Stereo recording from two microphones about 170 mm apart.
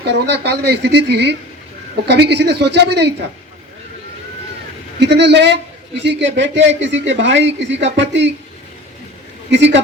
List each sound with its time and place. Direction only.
0.0 s a woman's voice: 80° right
4.9 s speech: 90° right
9.5 s speech: 90° right